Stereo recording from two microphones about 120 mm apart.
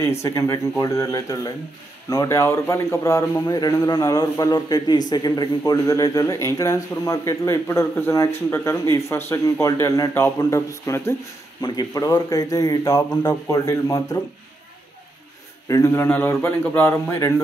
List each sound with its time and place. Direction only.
0.0 s a man's voice: 25° left (ahead or behind)
15.7 s speech: 25° left (ahead or behind)